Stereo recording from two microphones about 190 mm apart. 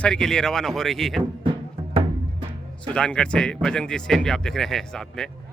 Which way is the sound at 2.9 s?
5° left (ahead or behind).